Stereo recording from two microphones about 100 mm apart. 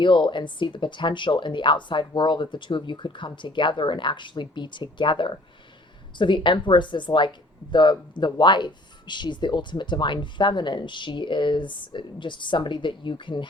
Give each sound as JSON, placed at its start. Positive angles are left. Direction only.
{"t": 0.0, "sound": "speech", "side_deg": 50}